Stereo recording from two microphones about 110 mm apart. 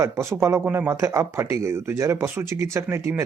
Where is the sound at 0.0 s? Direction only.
25° right (ahead or behind).